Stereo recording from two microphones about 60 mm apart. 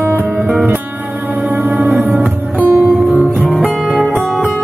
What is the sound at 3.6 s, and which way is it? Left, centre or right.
Music, centre.